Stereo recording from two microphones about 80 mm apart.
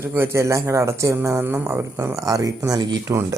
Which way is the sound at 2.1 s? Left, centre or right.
Right.